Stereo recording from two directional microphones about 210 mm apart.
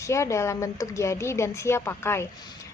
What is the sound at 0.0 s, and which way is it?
A woman's voice, 15° left (ahead or behind).